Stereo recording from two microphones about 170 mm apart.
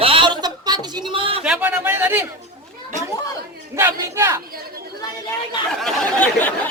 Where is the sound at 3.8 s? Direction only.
15° right (ahead or behind).